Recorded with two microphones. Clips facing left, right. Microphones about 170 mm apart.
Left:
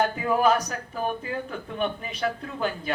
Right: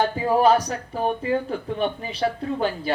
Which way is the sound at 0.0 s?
30° right (ahead or behind).